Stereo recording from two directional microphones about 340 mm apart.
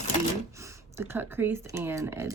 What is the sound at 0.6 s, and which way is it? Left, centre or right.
Speech, centre.